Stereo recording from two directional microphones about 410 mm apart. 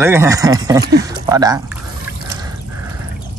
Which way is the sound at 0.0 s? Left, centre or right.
Centre.